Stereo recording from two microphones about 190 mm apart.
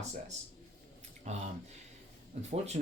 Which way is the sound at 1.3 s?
35° right (ahead or behind).